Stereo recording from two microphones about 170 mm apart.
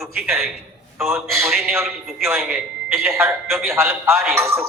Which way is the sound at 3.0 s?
15° right (ahead or behind).